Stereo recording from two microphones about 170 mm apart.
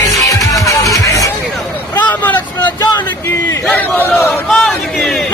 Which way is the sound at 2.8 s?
25° left (ahead or behind).